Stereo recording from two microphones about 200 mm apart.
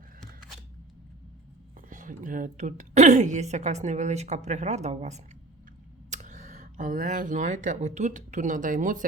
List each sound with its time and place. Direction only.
1.7 s a woman's voice: 40° right (ahead or behind)